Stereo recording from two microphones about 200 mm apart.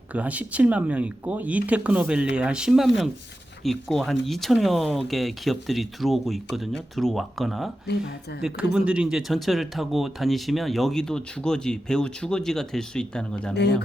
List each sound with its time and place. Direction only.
0.1 s speech: 5° right (ahead or behind)
7.9 s a woman's voice: 55° left (ahead or behind)
8.4 s speech: 5° right (ahead or behind)
13.6 s a woman's voice: 55° left (ahead or behind)